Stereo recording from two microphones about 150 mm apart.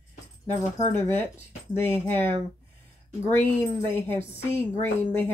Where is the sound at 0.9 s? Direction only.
15° left (ahead or behind).